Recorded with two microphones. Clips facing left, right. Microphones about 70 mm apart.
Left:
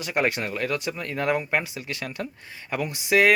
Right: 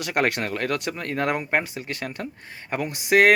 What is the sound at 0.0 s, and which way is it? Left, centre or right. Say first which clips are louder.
Speech: right 1 dB; right.